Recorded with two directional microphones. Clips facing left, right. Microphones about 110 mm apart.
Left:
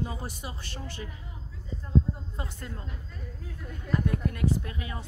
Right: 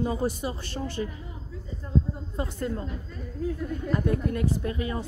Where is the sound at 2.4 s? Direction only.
35° right (ahead or behind).